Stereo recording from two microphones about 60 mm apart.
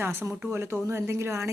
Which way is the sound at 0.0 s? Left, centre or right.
Right.